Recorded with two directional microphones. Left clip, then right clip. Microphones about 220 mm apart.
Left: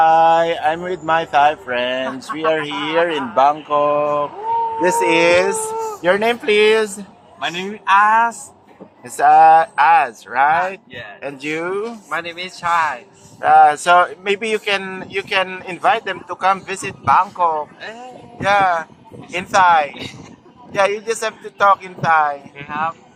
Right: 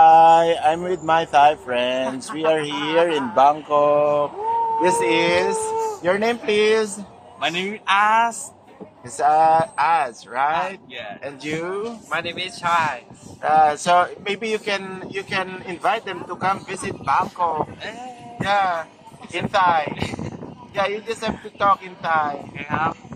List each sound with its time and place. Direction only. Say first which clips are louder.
0.0 s speech: right 1 dB; 5° left (ahead or behind)
4.8 s a man's voice: left 5 dB; 35° left (ahead or behind)
7.3 s a man's voice: even; 10° right (ahead or behind)
9.1 s speech: left 6 dB; 40° left (ahead or behind)
12.1 s speech: even; centre (ahead or behind)
13.4 s speech: left 6 dB; 30° left (ahead or behind)
14.3 s a man's voice: left 5 dB; 40° left (ahead or behind)
22.5 s speech: left 1 dB; 5° right (ahead or behind)